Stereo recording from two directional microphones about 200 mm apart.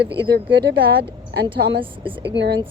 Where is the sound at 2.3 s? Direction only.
60° right (ahead or behind).